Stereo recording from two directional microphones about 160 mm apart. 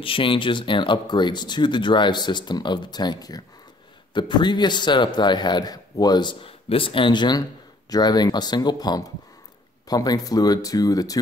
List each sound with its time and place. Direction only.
0.0 s speech: 35° left (ahead or behind)